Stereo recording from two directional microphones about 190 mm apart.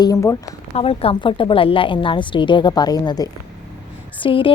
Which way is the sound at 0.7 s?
30° left (ahead or behind).